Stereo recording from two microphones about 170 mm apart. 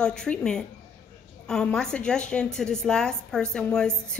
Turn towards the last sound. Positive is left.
turn(degrees=5)  # may be behind; listen again after turning